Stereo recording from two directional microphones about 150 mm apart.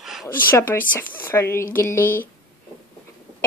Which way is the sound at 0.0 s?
Centre (ahead or behind).